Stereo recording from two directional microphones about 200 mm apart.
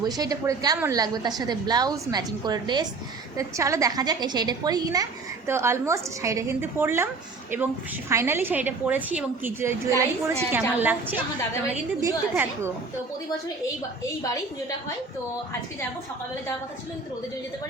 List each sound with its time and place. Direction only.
0.0 s a woman's voice: 20° right (ahead or behind)
12.3 s a woman's voice: 10° right (ahead or behind)